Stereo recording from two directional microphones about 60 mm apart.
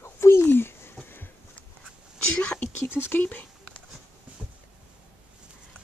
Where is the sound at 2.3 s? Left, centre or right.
Left.